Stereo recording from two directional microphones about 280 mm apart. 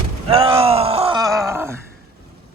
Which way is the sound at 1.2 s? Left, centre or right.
Centre.